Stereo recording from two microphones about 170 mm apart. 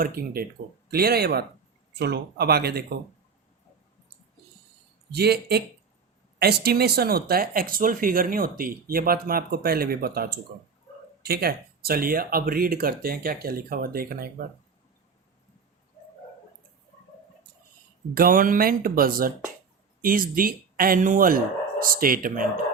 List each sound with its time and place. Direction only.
0.2 s speech: 60° right (ahead or behind)
5.1 s speech: 70° right (ahead or behind)
18.1 s speech: 55° right (ahead or behind)